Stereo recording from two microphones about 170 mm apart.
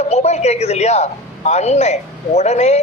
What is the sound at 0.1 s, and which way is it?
A man's voice, 40° left (ahead or behind).